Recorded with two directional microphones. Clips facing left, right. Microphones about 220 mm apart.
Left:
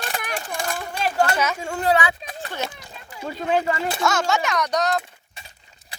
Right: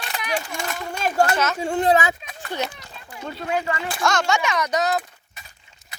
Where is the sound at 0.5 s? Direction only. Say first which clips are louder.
Left 1 dB; 35° left (ahead or behind).